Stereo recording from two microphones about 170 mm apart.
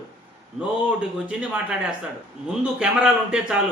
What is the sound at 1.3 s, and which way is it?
Speech, 5° right (ahead or behind).